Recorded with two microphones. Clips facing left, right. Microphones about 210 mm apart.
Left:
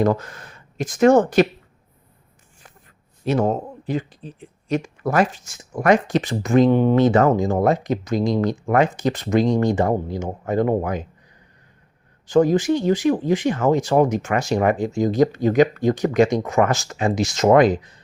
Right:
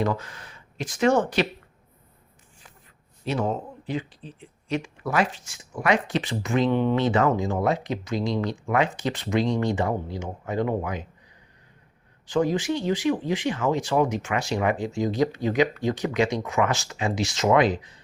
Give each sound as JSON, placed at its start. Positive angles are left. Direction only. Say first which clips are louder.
{"t": 0.0, "sound": "speech", "louder": "left 7 dB", "side_deg": 45}
{"t": 3.2, "sound": "speech", "louder": "left 6 dB", "side_deg": 45}
{"t": 12.3, "sound": "speech", "louder": "left 7 dB", "side_deg": 45}